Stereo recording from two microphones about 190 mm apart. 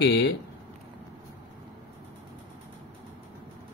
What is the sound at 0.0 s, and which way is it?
Speech, 65° left (ahead or behind).